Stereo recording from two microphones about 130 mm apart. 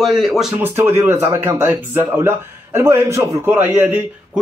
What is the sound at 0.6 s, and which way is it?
Speech, 15° right (ahead or behind).